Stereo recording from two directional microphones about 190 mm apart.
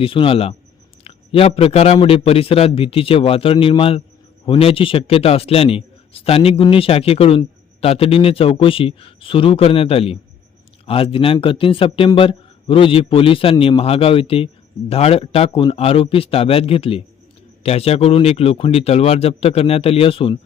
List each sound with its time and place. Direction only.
0.0 s a man's voice: 30° left (ahead or behind)